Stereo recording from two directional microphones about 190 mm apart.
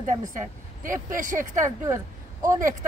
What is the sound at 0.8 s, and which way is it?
Speech, 45° right (ahead or behind).